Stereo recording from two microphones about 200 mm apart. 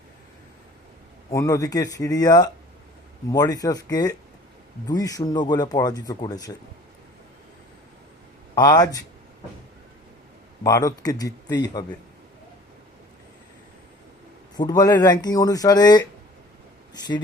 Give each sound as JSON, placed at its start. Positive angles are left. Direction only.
{"t": 1.3, "sound": "a man's voice", "side_deg": 15}
{"t": 8.5, "sound": "speech", "side_deg": 20}
{"t": 10.6, "sound": "a man's voice", "side_deg": 20}
{"t": 14.5, "sound": "speech", "side_deg": 20}